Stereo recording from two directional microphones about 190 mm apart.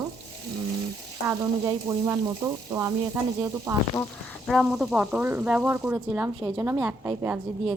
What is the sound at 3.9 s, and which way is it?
Speech, 10° left (ahead or behind).